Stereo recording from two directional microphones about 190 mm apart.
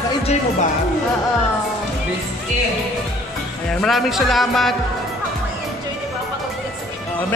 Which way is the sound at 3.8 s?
Centre (ahead or behind).